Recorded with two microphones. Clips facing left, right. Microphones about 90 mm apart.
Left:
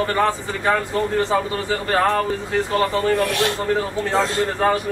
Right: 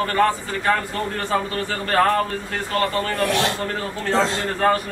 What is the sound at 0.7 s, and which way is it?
A man's voice, 15° left (ahead or behind).